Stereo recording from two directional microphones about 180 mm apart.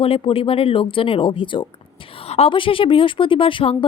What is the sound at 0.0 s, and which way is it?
A woman's voice, 30° left (ahead or behind).